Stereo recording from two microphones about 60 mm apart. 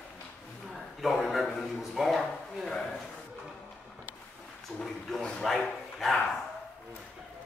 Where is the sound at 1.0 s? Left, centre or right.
Centre.